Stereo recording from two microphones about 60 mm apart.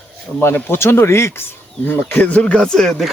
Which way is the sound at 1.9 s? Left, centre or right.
Left.